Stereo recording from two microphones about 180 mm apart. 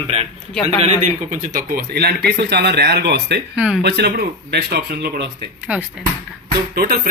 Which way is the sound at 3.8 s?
70° right (ahead or behind).